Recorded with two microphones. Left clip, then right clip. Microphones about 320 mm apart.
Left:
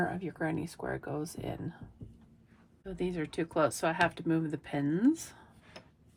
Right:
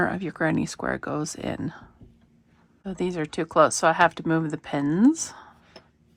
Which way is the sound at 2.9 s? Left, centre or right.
Centre.